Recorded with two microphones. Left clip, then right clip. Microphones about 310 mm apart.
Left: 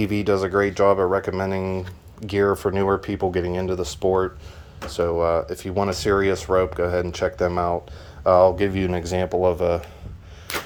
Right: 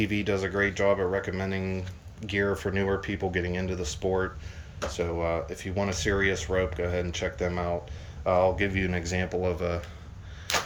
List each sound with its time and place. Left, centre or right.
0.0 s speech: centre